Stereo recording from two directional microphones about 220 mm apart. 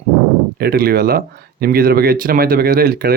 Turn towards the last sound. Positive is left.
turn(degrees=-45)  # may be behind; listen again after turning